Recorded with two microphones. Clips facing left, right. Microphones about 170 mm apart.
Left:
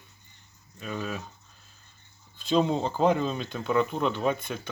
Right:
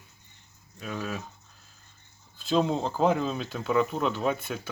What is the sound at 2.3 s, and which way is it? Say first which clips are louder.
Speech: left 1 dB; centre (ahead or behind).